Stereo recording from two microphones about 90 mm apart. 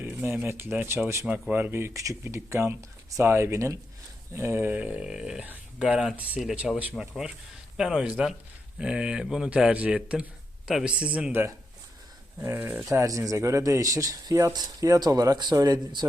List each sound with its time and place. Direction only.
0.0 s a sound: 25° right (ahead or behind)
0.4 s speech: 25° right (ahead or behind)
4.7 s speech: 15° right (ahead or behind)
12.4 s speech: 25° right (ahead or behind)
12.8 s speech: 35° right (ahead or behind)